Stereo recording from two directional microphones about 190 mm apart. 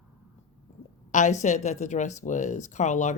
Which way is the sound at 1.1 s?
40° left (ahead or behind).